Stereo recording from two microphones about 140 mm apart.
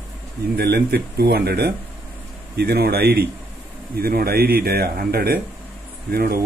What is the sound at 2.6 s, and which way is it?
A man's voice, 90° right.